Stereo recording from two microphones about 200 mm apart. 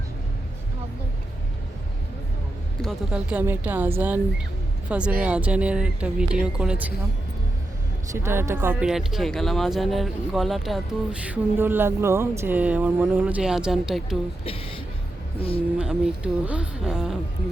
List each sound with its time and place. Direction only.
2.8 s speech: centre (ahead or behind)
8.1 s speech: 15° right (ahead or behind)
15.4 s speech: 30° left (ahead or behind)
15.8 s speech: 5° right (ahead or behind)